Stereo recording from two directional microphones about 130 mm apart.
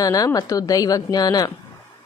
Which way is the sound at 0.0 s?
25° left (ahead or behind).